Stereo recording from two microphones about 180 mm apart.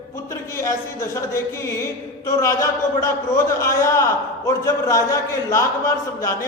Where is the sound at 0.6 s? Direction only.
15° left (ahead or behind).